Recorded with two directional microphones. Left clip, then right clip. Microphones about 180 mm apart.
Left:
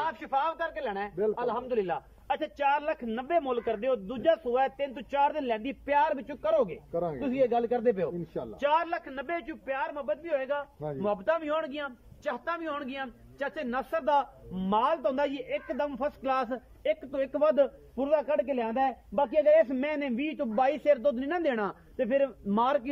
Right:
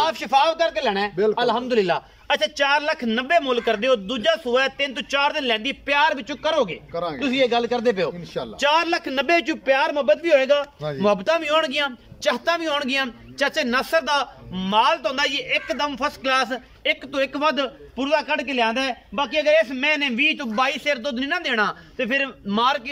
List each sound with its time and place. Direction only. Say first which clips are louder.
0.0 s speech: right 11 dB; 15° right (ahead or behind)
0.8 s a man's voice: right 11 dB; 5° right (ahead or behind)
1.1 s a man's voice: right 7 dB; 10° left (ahead or behind); by 8.1 s 30° left (ahead or behind)
8.4 s a man's voice: right 8 dB; 10° left (ahead or behind)
8.9 s a man's voice: right 13 dB; 15° right (ahead or behind); by 13.9 s 5° left (ahead or behind)
14.6 s a man's voice: right 8 dB; 30° left (ahead or behind)